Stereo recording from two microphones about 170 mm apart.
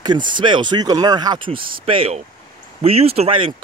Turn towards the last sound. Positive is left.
turn(degrees=-30)  # may be behind; listen again after turning